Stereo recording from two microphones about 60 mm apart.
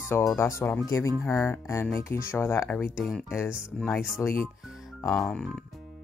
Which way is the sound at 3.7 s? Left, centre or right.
Centre.